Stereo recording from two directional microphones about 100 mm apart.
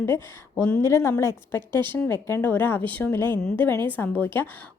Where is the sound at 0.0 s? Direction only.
25° left (ahead or behind).